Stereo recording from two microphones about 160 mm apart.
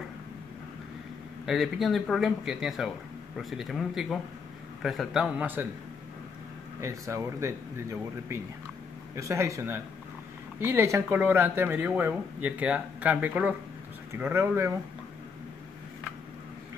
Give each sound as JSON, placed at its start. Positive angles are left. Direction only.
{"t": 1.4, "sound": "speech", "side_deg": 0}
{"t": 6.8, "sound": "speech", "side_deg": -20}